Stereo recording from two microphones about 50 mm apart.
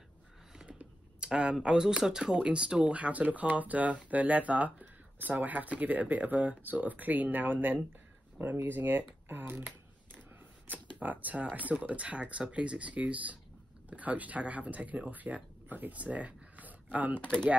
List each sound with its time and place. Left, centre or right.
0.7 s speech: right
10.7 s speech: right